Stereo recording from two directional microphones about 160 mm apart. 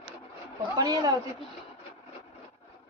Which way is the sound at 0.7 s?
20° right (ahead or behind).